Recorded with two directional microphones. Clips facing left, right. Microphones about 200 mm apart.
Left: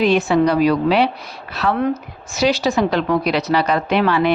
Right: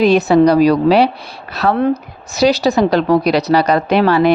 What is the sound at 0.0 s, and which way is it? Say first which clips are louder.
A woman's voice: right 5 dB; 40° right (ahead or behind).